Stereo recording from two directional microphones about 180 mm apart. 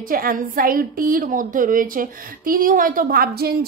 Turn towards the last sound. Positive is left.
turn(degrees=-60)  # may be behind; listen again after turning